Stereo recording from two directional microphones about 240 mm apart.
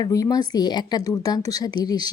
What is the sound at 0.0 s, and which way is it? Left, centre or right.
Speech, centre.